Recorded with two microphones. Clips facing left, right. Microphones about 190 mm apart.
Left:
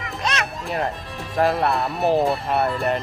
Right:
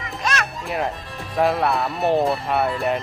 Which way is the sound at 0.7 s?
Centre (ahead or behind).